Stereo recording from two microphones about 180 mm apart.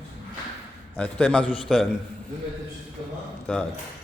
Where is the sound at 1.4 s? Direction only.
30° left (ahead or behind).